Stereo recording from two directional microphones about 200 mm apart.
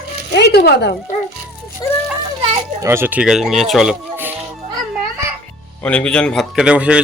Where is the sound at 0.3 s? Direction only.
55° left (ahead or behind).